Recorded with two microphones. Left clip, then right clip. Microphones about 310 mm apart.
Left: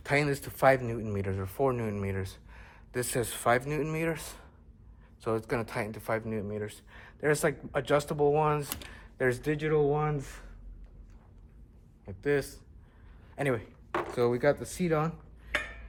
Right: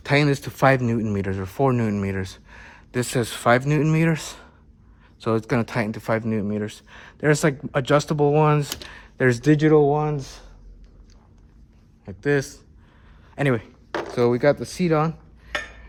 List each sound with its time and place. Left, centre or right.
0.0 s speech: right; by 10.4 s centre
12.0 s speech: right